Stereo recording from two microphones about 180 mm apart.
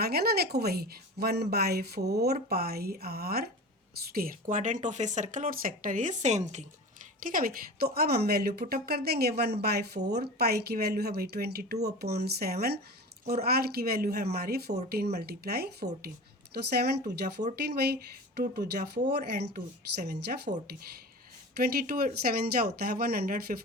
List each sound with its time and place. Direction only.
0.0 s a woman's voice: 60° right (ahead or behind); by 6.7 s 40° right (ahead or behind)
7.2 s a woman's voice: 50° right (ahead or behind)
21.6 s a woman's voice: 55° right (ahead or behind)